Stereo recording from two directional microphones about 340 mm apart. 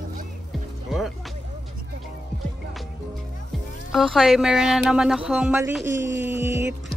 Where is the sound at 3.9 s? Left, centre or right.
Centre.